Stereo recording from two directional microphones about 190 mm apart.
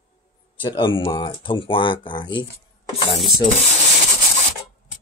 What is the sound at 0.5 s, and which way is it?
Speech, 25° left (ahead or behind).